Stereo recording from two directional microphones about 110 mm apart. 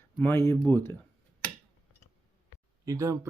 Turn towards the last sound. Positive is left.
turn(degrees=-30)  # may be behind; listen again after turning